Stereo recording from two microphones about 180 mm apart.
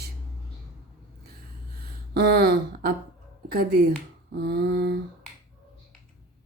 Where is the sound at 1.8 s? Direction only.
60° right (ahead or behind).